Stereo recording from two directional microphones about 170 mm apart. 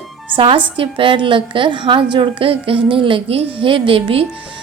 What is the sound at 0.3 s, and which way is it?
A woman's voice, 30° right (ahead or behind).